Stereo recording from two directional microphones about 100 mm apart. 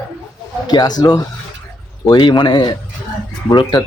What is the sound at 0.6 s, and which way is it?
A man's voice, 40° left (ahead or behind).